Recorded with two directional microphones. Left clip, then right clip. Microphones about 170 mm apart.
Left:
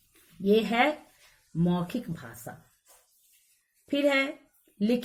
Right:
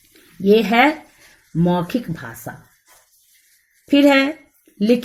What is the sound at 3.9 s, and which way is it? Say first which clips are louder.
Speech: right 12 dB; 40° right (ahead or behind).